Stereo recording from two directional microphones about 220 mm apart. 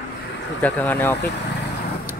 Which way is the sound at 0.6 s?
5° left (ahead or behind).